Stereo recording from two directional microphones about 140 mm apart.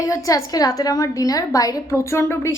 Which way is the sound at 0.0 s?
25° left (ahead or behind).